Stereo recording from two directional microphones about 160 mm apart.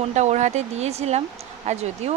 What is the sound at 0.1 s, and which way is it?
Speech, 45° right (ahead or behind).